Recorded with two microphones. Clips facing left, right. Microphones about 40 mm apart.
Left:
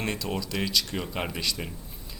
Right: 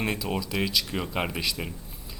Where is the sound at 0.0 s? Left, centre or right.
Centre.